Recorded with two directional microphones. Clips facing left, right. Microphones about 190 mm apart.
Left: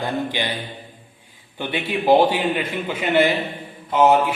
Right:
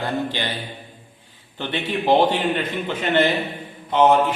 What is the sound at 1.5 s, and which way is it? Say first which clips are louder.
A man's voice: left 1 dB; 10° left (ahead or behind).